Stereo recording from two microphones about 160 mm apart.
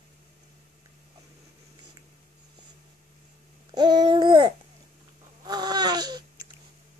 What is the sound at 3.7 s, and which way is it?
Babbling, 25° right (ahead or behind).